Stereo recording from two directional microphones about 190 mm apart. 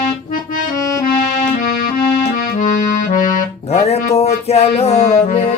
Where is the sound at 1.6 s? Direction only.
45° left (ahead or behind).